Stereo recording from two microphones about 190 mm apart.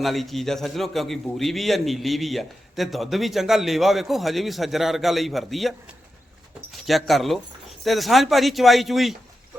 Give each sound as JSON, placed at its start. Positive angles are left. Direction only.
{"t": 0.0, "sound": "a man's voice", "side_deg": 0}
{"t": 6.8, "sound": "a man's voice", "side_deg": 0}